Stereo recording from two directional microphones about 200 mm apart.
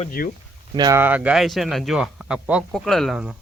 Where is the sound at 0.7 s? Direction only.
20° right (ahead or behind).